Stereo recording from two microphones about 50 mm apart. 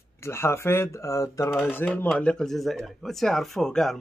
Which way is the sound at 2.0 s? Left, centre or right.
Left.